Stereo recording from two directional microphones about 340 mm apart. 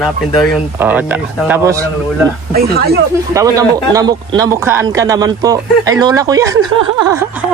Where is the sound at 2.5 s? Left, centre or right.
Right.